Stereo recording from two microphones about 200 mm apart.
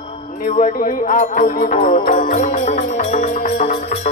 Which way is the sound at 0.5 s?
40° left (ahead or behind).